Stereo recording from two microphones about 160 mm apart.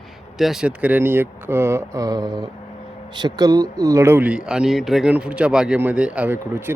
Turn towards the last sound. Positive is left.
turn(degrees=-15)  # may be behind; listen again after turning